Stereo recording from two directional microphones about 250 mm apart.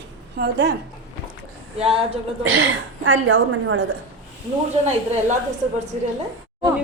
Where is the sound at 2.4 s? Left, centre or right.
Right.